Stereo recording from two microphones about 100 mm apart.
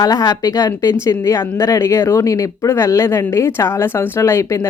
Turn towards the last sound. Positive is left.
turn(degrees=30)  # may be behind; listen again after turning